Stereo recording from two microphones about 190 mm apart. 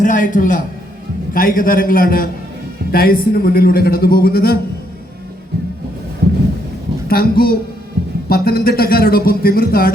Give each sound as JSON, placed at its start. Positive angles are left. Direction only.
{"t": 0.0, "sound": "a man's voice", "side_deg": 45}
{"t": 7.1, "sound": "speech", "side_deg": 50}